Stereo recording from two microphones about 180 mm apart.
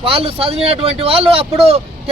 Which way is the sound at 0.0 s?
30° right (ahead or behind).